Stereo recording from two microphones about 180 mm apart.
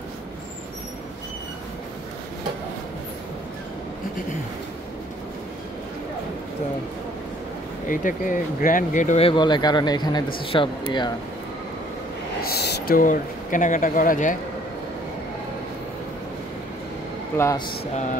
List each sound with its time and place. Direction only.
7.9 s speech: 50° left (ahead or behind); by 11.1 s 25° left (ahead or behind)
12.4 s speech: 60° left (ahead or behind)
17.4 s speech: 15° left (ahead or behind)